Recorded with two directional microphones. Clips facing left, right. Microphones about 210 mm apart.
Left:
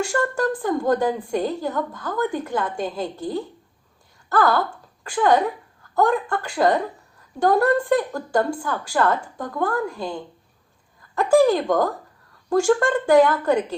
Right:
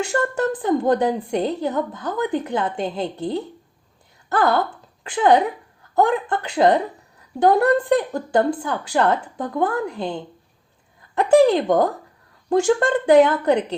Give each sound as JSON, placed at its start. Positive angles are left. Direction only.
{"t": 0.1, "sound": "a woman's voice", "side_deg": -20}
{"t": 11.3, "sound": "a woman's voice", "side_deg": -20}